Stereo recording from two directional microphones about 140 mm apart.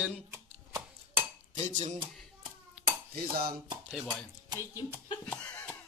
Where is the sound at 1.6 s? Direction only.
55° right (ahead or behind).